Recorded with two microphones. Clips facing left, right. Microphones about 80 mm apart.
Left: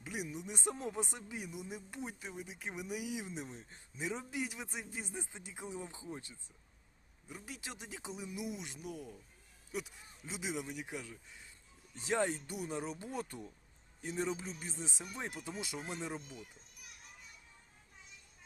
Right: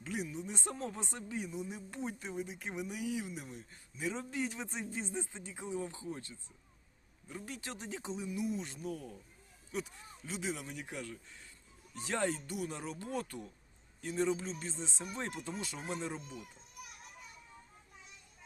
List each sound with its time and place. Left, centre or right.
0.0 s speech: centre
4.0 s speech: centre
7.3 s speech: centre
10.2 s speech: centre